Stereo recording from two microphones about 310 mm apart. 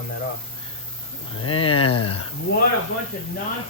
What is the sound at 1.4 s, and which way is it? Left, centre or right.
Speech, centre.